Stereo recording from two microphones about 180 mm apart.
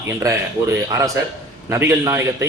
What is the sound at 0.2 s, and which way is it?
A man's voice, 15° right (ahead or behind).